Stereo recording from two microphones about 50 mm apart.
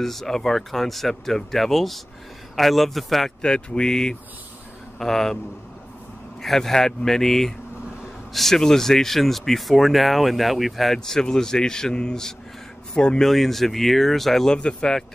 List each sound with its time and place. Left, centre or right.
0.0 s speech: centre
3.4 s speech: centre
6.4 s speech: centre
13.2 s speech: centre